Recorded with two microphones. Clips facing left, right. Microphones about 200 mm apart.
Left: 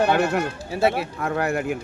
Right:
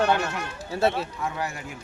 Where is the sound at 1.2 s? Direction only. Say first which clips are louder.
Left 8 dB; 60° left (ahead or behind).